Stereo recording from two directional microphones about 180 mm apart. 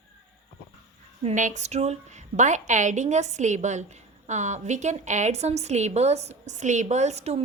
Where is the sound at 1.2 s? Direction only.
40° right (ahead or behind).